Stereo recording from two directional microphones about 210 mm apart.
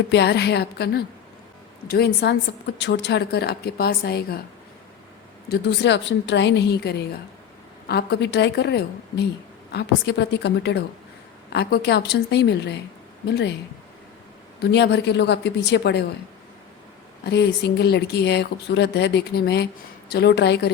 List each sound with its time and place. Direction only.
0.1 s a woman's voice: 50° left (ahead or behind)
5.5 s a woman's voice: 55° left (ahead or behind)
14.6 s a woman's voice: 55° left (ahead or behind)
17.2 s a woman's voice: 50° left (ahead or behind)